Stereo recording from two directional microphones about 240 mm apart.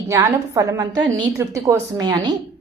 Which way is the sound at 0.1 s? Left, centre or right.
Centre.